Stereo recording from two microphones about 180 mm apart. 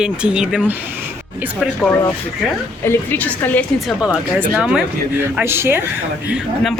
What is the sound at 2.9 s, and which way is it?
Speech, 10° left (ahead or behind).